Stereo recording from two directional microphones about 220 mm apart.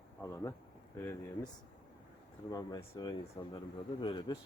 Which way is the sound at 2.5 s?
15° left (ahead or behind).